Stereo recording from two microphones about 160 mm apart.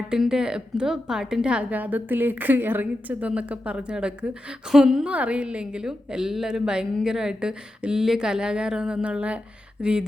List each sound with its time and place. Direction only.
0.1 s a woman's voice: 5° right (ahead or behind)